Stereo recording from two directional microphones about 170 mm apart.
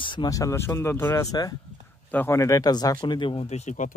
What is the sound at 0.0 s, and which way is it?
Speech, 25° left (ahead or behind).